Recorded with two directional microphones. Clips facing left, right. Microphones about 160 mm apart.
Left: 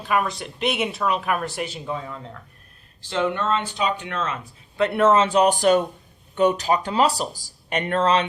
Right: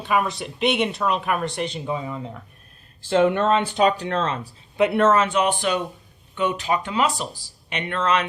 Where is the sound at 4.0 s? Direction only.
35° right (ahead or behind).